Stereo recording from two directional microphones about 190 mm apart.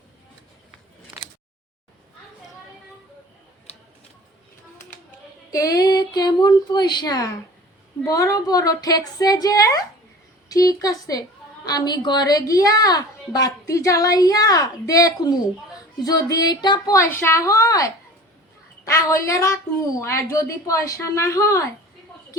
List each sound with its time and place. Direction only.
5.5 s a woman's voice: 20° left (ahead or behind)